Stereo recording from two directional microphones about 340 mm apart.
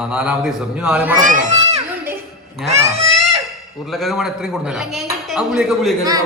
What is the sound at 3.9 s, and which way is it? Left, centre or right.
A man's voice, centre.